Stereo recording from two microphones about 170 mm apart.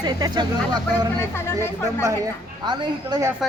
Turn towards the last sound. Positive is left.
turn(degrees=-20)  # may be behind; listen again after turning